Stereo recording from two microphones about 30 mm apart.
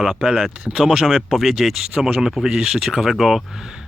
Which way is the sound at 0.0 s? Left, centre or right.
Right.